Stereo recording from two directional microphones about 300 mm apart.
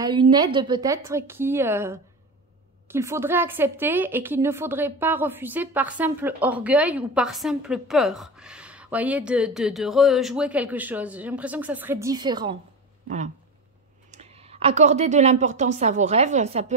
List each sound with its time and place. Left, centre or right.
0.0 s a woman's voice: centre
14.1 s a woman's voice: right